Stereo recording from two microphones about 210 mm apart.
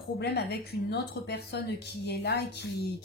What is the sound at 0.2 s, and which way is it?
A woman's voice, 50° left (ahead or behind).